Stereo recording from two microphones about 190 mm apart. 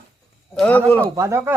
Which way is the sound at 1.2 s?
15° right (ahead or behind).